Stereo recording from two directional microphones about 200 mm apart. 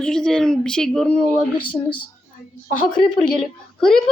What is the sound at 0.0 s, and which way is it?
Speech, 5° left (ahead or behind).